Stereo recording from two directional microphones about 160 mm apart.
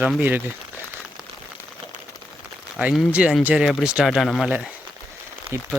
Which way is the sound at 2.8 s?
10° right (ahead or behind).